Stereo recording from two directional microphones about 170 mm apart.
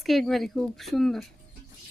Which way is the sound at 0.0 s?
Centre (ahead or behind).